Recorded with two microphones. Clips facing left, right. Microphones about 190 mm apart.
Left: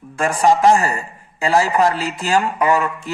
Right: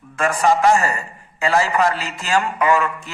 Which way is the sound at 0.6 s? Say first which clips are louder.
Left 2 dB; 30° left (ahead or behind).